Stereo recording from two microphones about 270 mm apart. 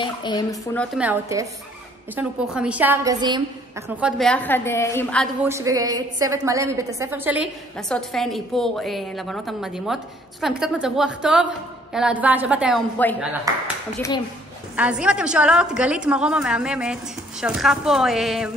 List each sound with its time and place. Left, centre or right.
0.0 s speech: centre
0.9 s a woman's voice: centre
4.0 s a woman's voice: centre
5.5 s a woman's voice: centre
14.8 s a woman's voice: centre